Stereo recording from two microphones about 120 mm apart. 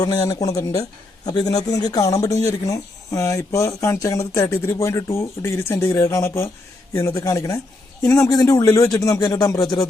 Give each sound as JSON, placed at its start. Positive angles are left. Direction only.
{"t": 0.0, "sound": "speech", "side_deg": 30}